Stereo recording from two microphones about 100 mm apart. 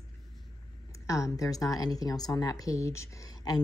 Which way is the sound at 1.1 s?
30° left (ahead or behind).